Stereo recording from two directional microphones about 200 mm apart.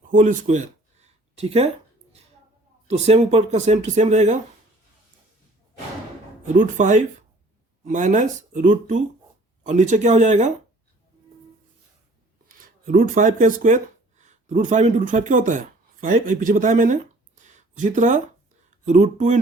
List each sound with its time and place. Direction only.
0.1 s a sound: 40° right (ahead or behind)
2.8 s speech: 35° right (ahead or behind)
6.4 s speech: 40° right (ahead or behind)
12.5 s speech: 45° right (ahead or behind)